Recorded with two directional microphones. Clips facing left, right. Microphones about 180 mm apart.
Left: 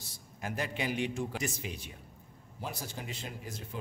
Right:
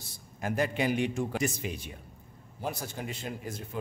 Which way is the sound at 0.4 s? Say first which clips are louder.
Right 6 dB; 50° right (ahead or behind).